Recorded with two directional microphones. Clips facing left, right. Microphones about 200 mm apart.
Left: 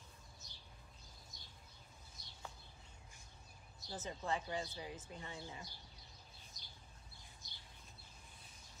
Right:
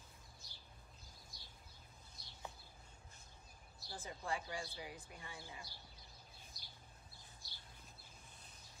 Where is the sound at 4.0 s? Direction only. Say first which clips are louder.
Left 3 dB; 20° left (ahead or behind).